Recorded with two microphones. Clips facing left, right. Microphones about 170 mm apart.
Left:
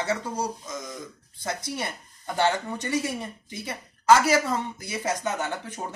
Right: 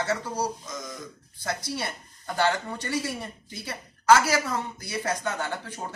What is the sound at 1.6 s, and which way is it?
A woman's voice, 20° left (ahead or behind).